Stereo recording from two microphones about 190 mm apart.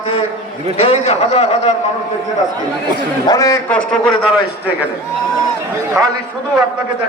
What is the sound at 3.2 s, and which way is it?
Speech, 20° left (ahead or behind).